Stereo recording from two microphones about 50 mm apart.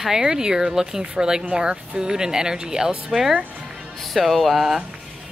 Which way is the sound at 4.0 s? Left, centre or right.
Centre.